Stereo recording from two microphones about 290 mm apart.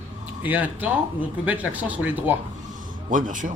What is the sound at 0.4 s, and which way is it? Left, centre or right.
Speech, centre.